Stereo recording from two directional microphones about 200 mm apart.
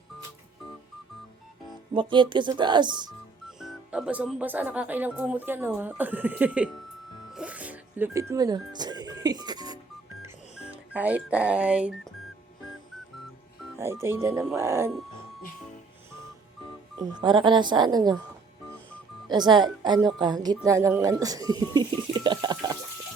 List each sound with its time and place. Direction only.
1.9 s speech: 25° right (ahead or behind)
3.6 s speech: 5° right (ahead or behind)
7.3 s music: 5° right (ahead or behind)
10.2 s music: 5° right (ahead or behind)
13.7 s speech: 15° right (ahead or behind)
17.0 s speech: 20° right (ahead or behind)
19.3 s speech: 20° right (ahead or behind)